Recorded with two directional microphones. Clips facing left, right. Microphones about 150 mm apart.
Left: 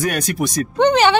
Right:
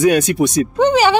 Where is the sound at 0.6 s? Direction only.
5° right (ahead or behind).